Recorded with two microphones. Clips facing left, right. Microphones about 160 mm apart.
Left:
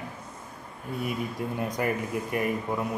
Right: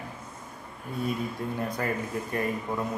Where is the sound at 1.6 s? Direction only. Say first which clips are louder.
Left 3 dB; 15° left (ahead or behind).